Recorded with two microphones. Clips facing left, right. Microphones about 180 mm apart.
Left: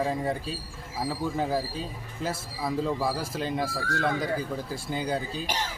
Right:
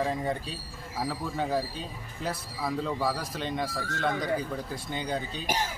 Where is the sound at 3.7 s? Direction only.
35° left (ahead or behind).